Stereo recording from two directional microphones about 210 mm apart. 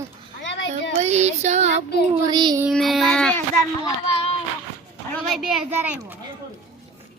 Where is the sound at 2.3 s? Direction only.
20° right (ahead or behind).